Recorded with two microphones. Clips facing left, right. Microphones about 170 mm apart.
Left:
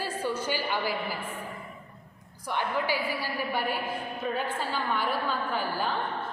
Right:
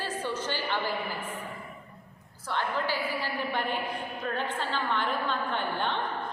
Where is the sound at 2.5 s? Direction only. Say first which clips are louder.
Left 1 dB; 10° left (ahead or behind).